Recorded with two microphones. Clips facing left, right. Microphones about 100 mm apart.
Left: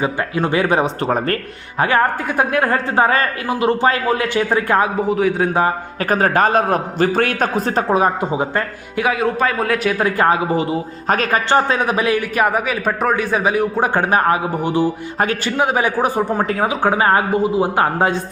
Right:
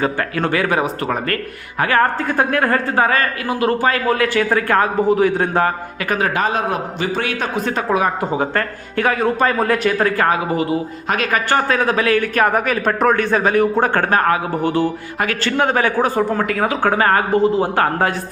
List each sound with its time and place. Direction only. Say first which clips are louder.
0.0 s a man's voice: even; 15° left (ahead or behind); by 1.4 s 30° left (ahead or behind)
1.8 s a man's voice: even; 15° left (ahead or behind)
4.9 s a man's voice: right 2 dB; centre (ahead or behind)
6.0 s a man's voice: left 4 dB; 40° left (ahead or behind)
8.3 s a man's voice: even; 15° left (ahead or behind)
10.0 s a man's voice: left 1 dB; 25° left (ahead or behind)